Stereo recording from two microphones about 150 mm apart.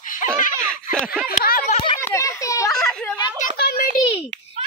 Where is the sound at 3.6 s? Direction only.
90° left.